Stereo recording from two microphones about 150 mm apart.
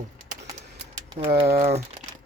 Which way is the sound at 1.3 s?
40° right (ahead or behind).